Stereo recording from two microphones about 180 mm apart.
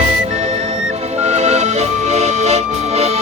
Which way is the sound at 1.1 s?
40° right (ahead or behind).